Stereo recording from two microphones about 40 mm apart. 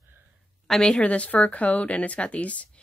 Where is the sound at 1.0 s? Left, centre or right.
Left.